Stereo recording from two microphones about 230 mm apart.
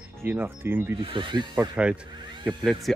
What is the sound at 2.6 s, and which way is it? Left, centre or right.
Speech, centre.